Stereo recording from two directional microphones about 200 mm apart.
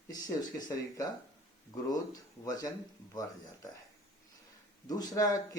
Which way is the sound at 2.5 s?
20° left (ahead or behind).